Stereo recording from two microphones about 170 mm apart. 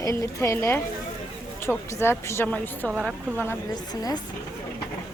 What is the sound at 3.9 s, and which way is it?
Speech, 20° left (ahead or behind).